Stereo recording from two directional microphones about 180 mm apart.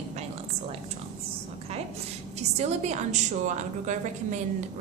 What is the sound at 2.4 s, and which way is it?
A woman's voice, 35° right (ahead or behind).